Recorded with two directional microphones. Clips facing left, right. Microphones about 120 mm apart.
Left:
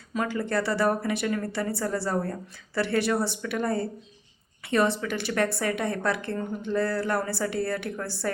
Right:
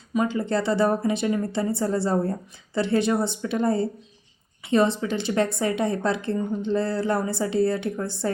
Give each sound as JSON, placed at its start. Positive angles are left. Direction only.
{"t": 0.1, "sound": "a woman's voice", "side_deg": -20}